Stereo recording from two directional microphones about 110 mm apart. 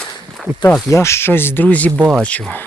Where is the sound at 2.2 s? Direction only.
10° left (ahead or behind).